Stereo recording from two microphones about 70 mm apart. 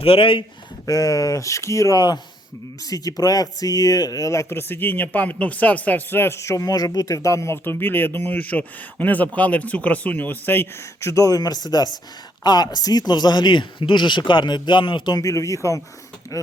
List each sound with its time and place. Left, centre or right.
0.9 s speech: left
2.9 s speech: left
6.7 s speech: left
7.6 s speech: left
11.1 s speech: left
12.4 s speech: left
15.2 s speech: left